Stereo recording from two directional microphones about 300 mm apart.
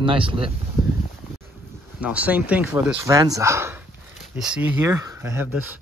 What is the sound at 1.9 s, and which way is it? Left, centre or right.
Speech, centre.